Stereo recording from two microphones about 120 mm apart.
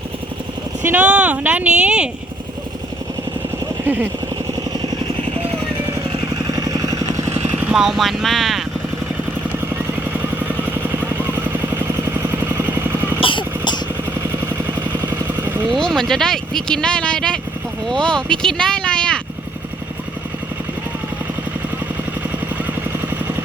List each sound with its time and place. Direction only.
0.8 s speech: 15° right (ahead or behind)
3.8 s speech: 15° right (ahead or behind)
6.5 s vehicle: 30° right (ahead or behind)
7.6 s speech: 5° right (ahead or behind)
12.5 s vehicle: 20° right (ahead or behind)
13.1 s vehicle: 45° left (ahead or behind)
15.0 s vehicle: 15° right (ahead or behind)
15.7 s speech: centre (ahead or behind)